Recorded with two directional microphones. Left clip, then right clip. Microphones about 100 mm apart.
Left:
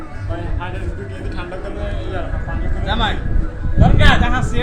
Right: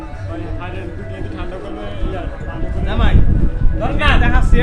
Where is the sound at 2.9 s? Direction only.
30° left (ahead or behind).